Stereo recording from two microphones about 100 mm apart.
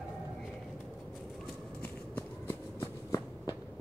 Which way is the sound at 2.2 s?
25° left (ahead or behind).